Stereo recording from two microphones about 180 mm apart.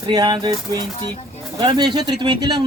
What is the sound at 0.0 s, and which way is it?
Speech, 25° right (ahead or behind).